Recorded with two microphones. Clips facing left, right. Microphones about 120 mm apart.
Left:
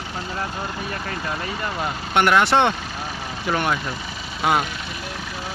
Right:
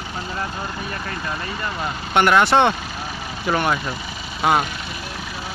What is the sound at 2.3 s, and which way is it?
Speech, 40° right (ahead or behind).